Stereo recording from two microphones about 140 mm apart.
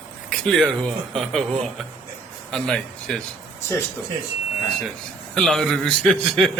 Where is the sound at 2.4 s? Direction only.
5° left (ahead or behind).